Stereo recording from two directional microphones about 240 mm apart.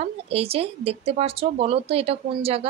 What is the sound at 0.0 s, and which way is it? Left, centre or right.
Speech, right.